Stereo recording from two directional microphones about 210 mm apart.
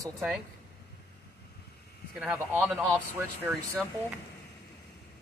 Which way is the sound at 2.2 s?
10° right (ahead or behind).